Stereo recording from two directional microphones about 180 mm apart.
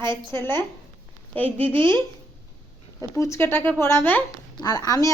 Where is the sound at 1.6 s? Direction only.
30° right (ahead or behind).